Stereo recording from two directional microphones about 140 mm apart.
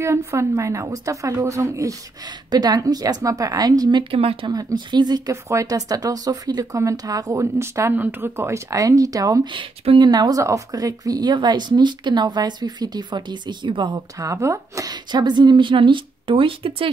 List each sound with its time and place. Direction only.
0.0 s speech: 20° right (ahead or behind)
4.1 s speech: 40° right (ahead or behind)
4.5 s speech: 25° right (ahead or behind)
9.5 s speech: 35° right (ahead or behind)